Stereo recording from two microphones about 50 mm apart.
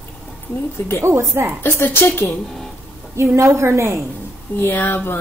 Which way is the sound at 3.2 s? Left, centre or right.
Right.